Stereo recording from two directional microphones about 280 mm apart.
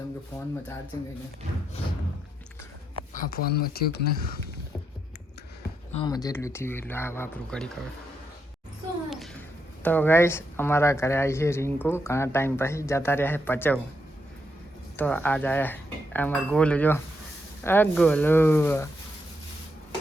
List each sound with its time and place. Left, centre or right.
3.1 s speech: left
5.9 s speech: centre
9.0 s a sound: centre
9.8 s speech: centre
14.9 s speech: centre